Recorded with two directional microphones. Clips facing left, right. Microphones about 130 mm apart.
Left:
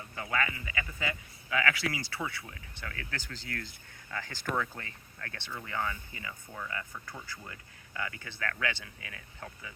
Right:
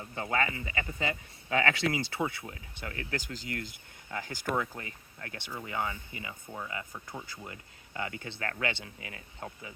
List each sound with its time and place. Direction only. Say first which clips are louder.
0.0 s speech: right 2 dB; 30° right (ahead or behind)